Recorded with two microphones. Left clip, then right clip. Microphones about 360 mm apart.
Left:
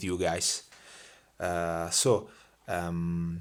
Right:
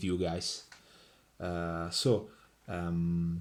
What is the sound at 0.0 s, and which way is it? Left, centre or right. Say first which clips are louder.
Speech: left 5 dB; centre.